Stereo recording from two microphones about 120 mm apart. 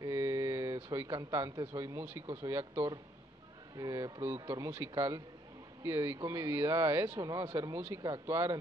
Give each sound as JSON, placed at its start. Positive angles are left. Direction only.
{"t": 0.0, "sound": "speech", "side_deg": -25}
{"t": 7.2, "sound": "speech", "side_deg": -30}